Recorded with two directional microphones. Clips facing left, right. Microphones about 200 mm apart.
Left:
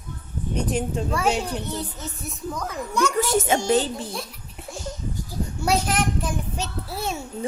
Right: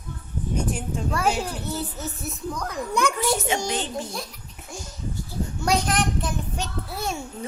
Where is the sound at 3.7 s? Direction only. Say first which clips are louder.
Left 6 dB; 35° left (ahead or behind).